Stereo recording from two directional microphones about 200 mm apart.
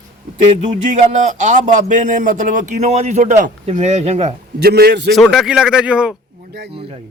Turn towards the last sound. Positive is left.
turn(degrees=-5)  # may be behind; listen again after turning